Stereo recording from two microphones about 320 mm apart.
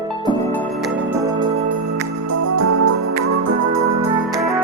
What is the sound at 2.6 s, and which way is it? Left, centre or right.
Organ, right.